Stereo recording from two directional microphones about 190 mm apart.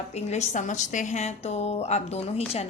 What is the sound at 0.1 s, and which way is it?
A woman's voice, 35° left (ahead or behind).